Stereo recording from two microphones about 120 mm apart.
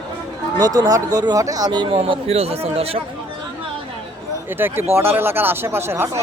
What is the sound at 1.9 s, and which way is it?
Speech, 55° right (ahead or behind).